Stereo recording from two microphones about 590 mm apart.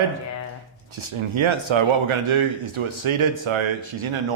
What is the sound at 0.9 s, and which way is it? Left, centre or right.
A man's voice, right.